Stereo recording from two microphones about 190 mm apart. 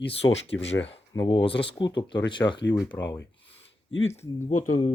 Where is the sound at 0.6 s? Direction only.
75° left (ahead or behind).